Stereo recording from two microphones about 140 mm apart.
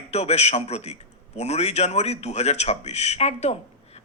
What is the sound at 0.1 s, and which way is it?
A woman's voice, 50° left (ahead or behind).